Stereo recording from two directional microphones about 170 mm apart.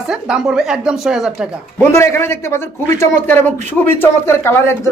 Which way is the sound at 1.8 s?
15° left (ahead or behind).